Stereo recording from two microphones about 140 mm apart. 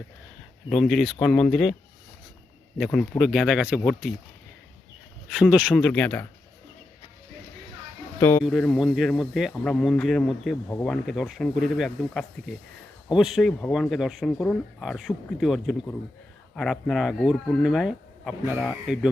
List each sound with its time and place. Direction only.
0.7 s speech: centre (ahead or behind)
2.7 s speech: centre (ahead or behind)
5.3 s speech: 10° right (ahead or behind)
5.7 s speech: 5° left (ahead or behind)
8.2 s speech: 15° left (ahead or behind)
8.4 s speech: 5° left (ahead or behind)